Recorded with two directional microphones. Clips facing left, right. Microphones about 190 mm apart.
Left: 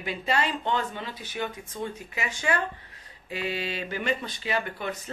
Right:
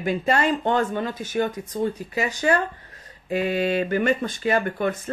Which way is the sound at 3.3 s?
50° right (ahead or behind).